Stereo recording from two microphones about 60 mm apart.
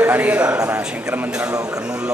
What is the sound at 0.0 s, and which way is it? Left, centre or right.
Speech, right.